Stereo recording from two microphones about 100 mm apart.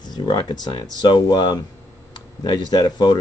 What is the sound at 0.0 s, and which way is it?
Speech, 45° left (ahead or behind).